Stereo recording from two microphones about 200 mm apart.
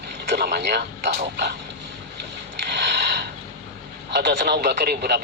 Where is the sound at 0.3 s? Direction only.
55° right (ahead or behind).